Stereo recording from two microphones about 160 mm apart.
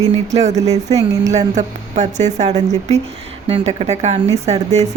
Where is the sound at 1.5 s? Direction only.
45° right (ahead or behind).